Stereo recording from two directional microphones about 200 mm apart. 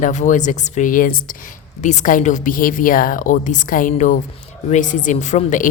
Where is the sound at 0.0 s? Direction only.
35° left (ahead or behind).